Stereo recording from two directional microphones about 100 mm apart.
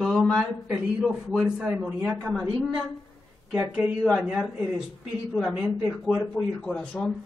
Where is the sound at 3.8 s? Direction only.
Centre (ahead or behind).